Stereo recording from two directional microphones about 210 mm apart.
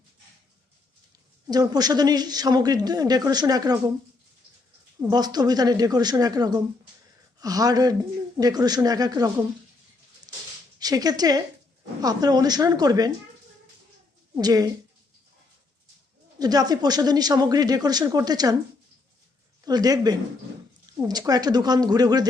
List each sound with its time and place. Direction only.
1.5 s a man's voice: 20° right (ahead or behind)
4.9 s a man's voice: 15° right (ahead or behind)
10.8 s a woman's voice: 20° right (ahead or behind)
14.3 s speech: 15° right (ahead or behind)
16.4 s a man's voice: 20° right (ahead or behind)
19.6 s a man's voice: 20° right (ahead or behind)